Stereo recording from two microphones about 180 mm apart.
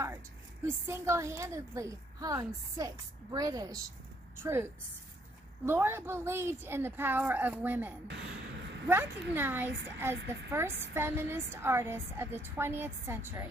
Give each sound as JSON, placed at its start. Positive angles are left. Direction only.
{"t": 0.8, "sound": "a woman's voice", "side_deg": -15}
{"t": 5.7, "sound": "a woman's voice", "side_deg": -15}